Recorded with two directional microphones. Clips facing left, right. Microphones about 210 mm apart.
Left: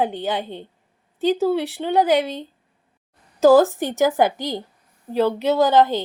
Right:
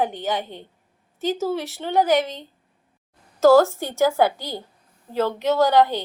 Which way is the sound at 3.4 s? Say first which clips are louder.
Left 1 dB; 15° left (ahead or behind).